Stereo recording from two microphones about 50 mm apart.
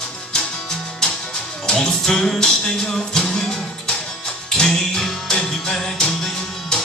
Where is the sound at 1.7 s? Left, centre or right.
Centre.